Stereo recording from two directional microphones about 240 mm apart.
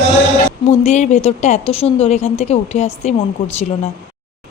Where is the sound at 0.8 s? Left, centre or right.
Left.